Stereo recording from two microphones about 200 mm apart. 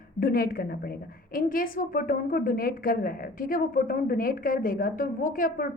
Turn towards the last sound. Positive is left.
turn(degrees=45)  # may be behind; listen again after turning